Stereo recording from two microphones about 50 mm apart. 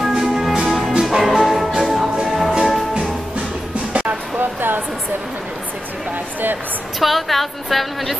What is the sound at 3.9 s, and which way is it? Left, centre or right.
Music, right.